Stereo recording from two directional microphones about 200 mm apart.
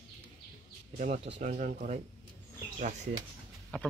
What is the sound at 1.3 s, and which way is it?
Speech, 35° right (ahead or behind).